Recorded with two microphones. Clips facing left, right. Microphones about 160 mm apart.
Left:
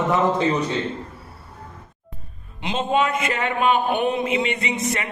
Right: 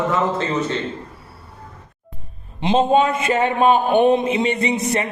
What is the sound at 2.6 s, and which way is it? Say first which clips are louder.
A man's voice: right 6 dB; 30° right (ahead or behind).